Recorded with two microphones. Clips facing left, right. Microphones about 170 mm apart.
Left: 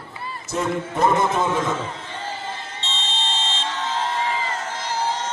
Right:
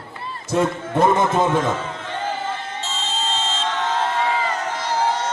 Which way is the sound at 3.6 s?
55° right (ahead or behind).